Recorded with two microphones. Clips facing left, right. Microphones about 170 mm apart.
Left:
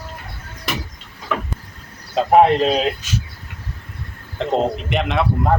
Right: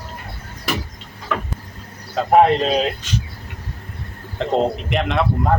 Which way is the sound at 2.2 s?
20° left (ahead or behind).